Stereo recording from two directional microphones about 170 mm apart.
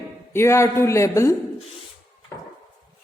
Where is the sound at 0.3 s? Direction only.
15° left (ahead or behind).